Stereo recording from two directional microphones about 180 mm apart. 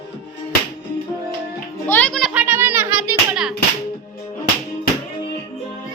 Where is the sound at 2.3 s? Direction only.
10° right (ahead or behind).